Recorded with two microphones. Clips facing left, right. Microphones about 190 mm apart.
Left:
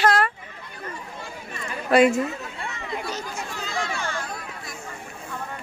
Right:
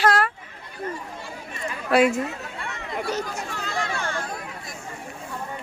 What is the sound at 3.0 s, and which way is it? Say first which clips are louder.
Chatter: right 4 dB; 65° right (ahead or behind).